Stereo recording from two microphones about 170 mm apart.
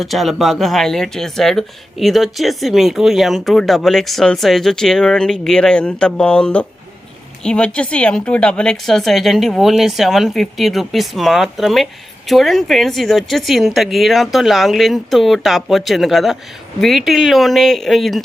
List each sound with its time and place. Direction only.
0.0 s speech: centre (ahead or behind)